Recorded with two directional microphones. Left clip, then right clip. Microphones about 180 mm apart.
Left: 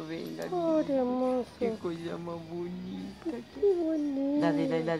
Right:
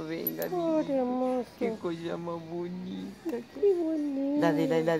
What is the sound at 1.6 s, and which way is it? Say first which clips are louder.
Speech: even; 50° right (ahead or behind).